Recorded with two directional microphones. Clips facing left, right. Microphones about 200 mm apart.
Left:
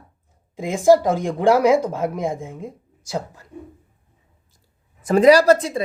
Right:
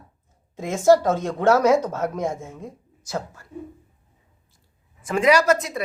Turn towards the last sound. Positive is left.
turn(degrees=30)  # may be behind; listen again after turning